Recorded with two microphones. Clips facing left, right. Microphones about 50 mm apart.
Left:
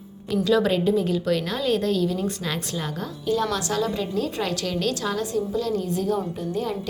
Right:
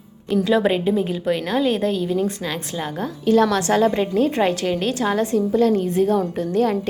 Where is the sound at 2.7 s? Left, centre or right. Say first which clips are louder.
Right 4 dB; centre.